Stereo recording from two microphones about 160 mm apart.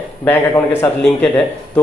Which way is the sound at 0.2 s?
10° left (ahead or behind).